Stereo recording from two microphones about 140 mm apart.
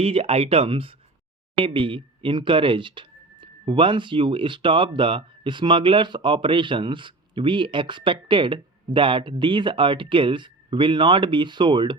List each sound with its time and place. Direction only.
0.0 s speech: 45° right (ahead or behind)